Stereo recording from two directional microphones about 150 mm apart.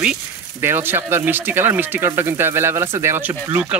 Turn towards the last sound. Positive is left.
turn(degrees=-10)  # may be behind; listen again after turning